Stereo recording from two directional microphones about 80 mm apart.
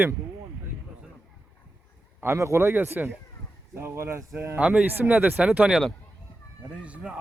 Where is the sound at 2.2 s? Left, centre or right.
Right.